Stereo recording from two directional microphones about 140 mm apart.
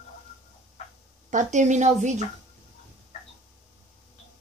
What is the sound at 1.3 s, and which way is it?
Speech, 60° right (ahead or behind).